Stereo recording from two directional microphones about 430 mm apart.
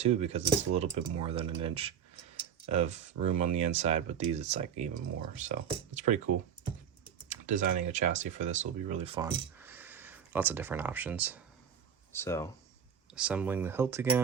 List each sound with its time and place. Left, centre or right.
0.0 s speech: centre
7.3 s speech: centre